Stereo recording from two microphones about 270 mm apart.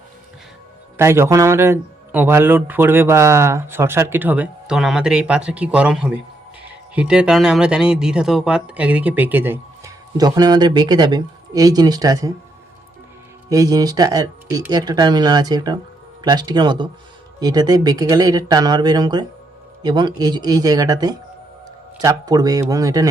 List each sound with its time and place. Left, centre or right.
0.9 s a man's voice: centre
13.5 s a man's voice: centre